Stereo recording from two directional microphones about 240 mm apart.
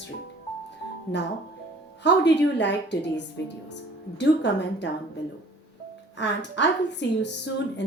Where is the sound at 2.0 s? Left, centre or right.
Left.